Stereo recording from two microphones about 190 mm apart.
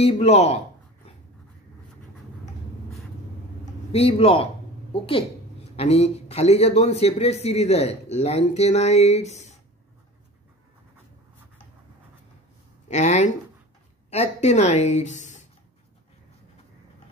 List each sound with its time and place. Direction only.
0.0 s a woman's voice: 35° left (ahead or behind)
3.6 s a woman's voice: 30° left (ahead or behind)
12.8 s a woman's voice: 35° left (ahead or behind)